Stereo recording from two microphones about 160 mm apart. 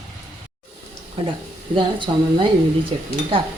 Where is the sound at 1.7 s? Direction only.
30° right (ahead or behind).